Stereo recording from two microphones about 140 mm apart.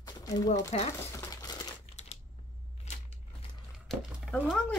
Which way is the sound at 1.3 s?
25° left (ahead or behind).